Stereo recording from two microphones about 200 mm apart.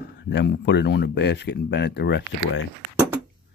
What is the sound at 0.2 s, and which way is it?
Speech, 60° left (ahead or behind).